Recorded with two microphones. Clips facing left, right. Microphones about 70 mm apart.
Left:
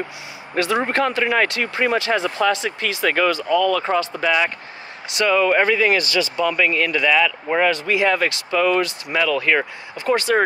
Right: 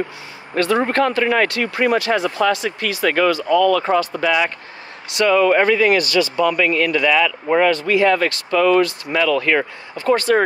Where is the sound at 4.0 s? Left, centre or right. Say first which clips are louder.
Right 2 dB; left.